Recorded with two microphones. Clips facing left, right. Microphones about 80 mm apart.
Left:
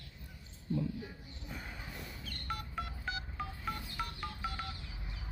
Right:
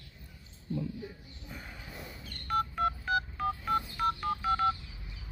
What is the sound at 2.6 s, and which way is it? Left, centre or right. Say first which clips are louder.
Telephone dialing: right 13 dB; right.